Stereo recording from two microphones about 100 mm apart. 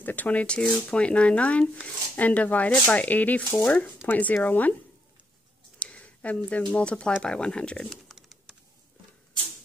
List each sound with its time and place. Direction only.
0.0 s speech: 15° left (ahead or behind)
5.8 s a sound: 15° left (ahead or behind)
6.7 s speech: 10° left (ahead or behind)